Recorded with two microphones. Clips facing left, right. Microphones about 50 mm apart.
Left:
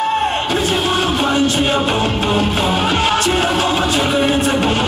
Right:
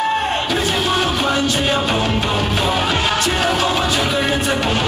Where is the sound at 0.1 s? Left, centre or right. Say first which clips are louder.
Left 2 dB; centre.